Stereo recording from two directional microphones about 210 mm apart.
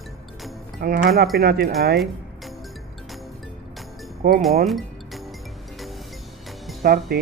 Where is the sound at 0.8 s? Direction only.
45° right (ahead or behind).